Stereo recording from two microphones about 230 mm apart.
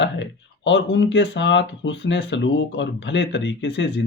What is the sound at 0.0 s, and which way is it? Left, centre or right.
Speech, left.